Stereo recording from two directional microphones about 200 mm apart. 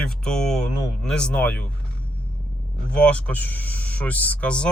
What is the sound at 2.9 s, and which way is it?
Speech, 5° left (ahead or behind).